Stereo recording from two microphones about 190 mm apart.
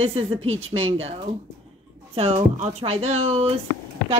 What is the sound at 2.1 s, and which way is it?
A woman's voice, 30° right (ahead or behind).